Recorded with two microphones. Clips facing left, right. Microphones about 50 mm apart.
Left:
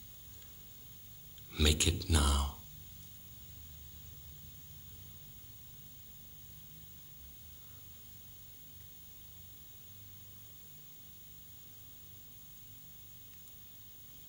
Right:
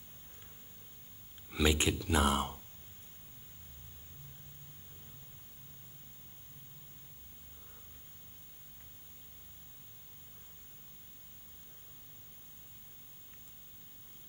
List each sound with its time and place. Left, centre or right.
1.5 s speech: right